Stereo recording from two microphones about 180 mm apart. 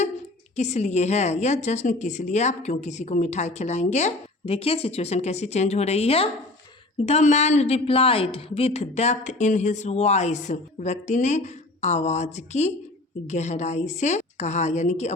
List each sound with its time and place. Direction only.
0.5 s a woman's voice: 40° left (ahead or behind)